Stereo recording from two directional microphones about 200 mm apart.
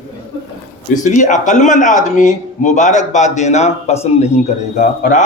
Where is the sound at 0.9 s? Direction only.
40° left (ahead or behind).